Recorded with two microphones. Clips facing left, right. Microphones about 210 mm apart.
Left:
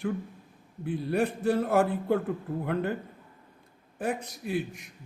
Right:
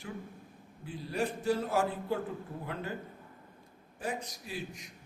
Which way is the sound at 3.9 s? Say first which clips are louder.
Left 6 dB; 60° left (ahead or behind).